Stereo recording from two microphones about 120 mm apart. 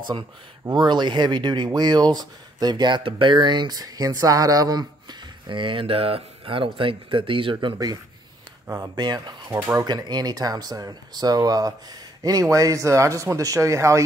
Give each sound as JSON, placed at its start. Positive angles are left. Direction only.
{"t": 0.7, "sound": "speech", "side_deg": -40}
{"t": 5.5, "sound": "speech", "side_deg": -45}
{"t": 7.6, "sound": "speech", "side_deg": -35}
{"t": 8.9, "sound": "speech", "side_deg": -40}